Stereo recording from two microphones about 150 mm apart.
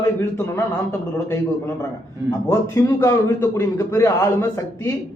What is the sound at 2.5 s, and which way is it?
A man's voice, 15° left (ahead or behind).